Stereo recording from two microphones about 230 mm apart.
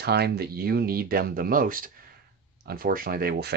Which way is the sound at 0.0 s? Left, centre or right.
Right.